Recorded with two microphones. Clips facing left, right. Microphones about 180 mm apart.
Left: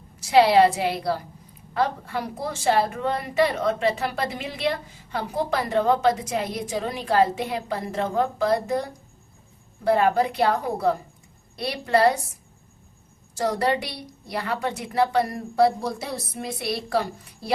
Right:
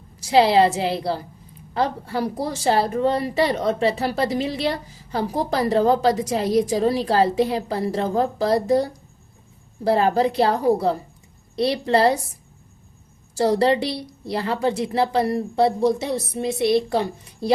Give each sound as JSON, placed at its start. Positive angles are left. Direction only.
{"t": 0.2, "sound": "a woman's voice", "side_deg": -30}
{"t": 13.3, "sound": "a woman's voice", "side_deg": -30}